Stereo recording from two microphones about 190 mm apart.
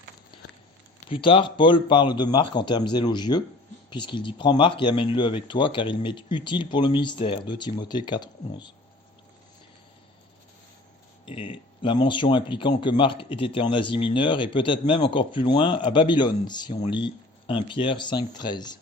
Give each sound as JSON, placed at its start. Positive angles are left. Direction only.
{"t": 1.1, "sound": "speech", "side_deg": 25}
{"t": 11.3, "sound": "speech", "side_deg": 30}